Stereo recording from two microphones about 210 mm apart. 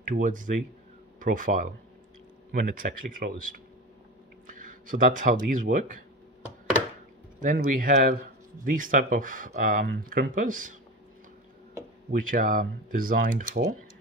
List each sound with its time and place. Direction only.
0.0 s speech: 40° right (ahead or behind)
7.3 s speech: 40° right (ahead or behind)
12.1 s speech: 40° right (ahead or behind)